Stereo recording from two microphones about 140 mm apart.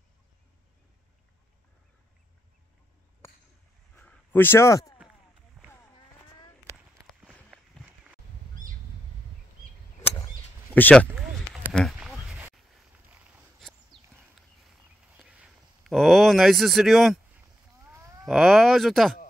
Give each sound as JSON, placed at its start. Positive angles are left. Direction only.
{"t": 3.9, "sound": "a sound", "side_deg": 10}
{"t": 7.8, "sound": "walk", "side_deg": -10}
{"t": 10.7, "sound": "speech", "side_deg": 10}
{"t": 11.1, "sound": "a sound", "side_deg": -5}
{"t": 13.1, "sound": "walk", "side_deg": -10}
{"t": 13.9, "sound": "horse", "side_deg": -35}
{"t": 15.1, "sound": "a sound", "side_deg": -5}
{"t": 17.8, "sound": "cattle", "side_deg": -20}
{"t": 18.2, "sound": "speech", "side_deg": 0}